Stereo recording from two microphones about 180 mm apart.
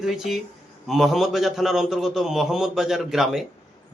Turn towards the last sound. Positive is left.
turn(degrees=0)  # may be behind; listen again after turning